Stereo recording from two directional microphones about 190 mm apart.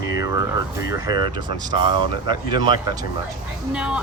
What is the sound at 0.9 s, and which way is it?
Speech, 20° right (ahead or behind).